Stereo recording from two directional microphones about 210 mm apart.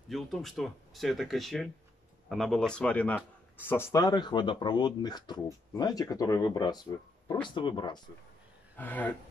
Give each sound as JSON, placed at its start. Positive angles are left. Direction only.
{"t": 0.1, "sound": "speech", "side_deg": 0}
{"t": 8.7, "sound": "speech", "side_deg": 10}